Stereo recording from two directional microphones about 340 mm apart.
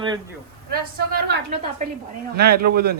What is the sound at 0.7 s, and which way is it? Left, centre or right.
A woman's voice, right.